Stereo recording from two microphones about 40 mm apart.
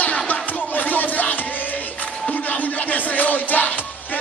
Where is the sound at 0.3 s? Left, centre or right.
Left.